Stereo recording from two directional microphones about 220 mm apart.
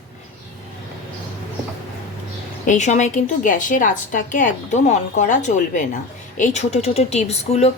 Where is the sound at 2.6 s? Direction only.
35° left (ahead or behind).